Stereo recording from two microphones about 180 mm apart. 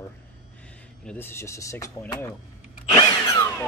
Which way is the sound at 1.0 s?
10° left (ahead or behind).